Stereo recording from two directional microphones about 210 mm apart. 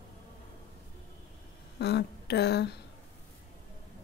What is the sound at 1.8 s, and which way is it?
Speech, 50° left (ahead or behind).